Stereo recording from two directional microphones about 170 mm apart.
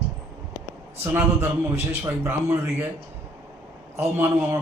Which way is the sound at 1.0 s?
10° right (ahead or behind).